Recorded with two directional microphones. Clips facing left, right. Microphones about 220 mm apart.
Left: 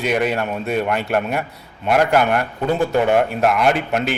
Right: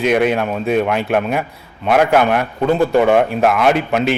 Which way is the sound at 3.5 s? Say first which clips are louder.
Right 3 dB; centre (ahead or behind).